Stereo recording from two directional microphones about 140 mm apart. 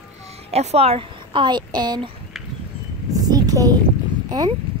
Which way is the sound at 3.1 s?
25° right (ahead or behind).